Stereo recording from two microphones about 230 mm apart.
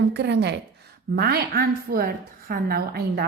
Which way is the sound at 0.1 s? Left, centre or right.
Right.